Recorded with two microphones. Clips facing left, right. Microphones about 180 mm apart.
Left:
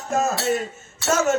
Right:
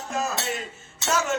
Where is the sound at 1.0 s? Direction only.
45° left (ahead or behind).